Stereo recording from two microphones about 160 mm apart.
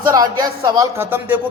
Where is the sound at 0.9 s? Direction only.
15° right (ahead or behind).